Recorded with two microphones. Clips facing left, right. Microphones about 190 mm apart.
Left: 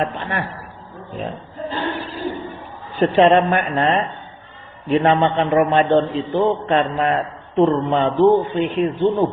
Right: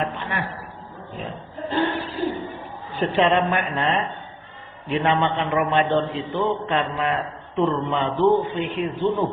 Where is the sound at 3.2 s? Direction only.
40° left (ahead or behind).